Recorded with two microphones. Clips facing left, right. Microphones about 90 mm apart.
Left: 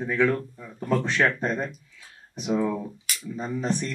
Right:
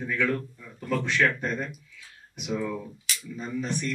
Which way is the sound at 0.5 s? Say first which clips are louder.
Left 4 dB; 35° left (ahead or behind).